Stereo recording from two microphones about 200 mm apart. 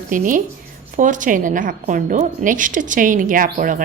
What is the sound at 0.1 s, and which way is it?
A woman's voice, 40° right (ahead or behind).